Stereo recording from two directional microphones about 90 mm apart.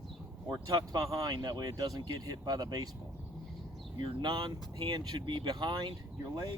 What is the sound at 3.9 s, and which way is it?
Speech, 60° right (ahead or behind).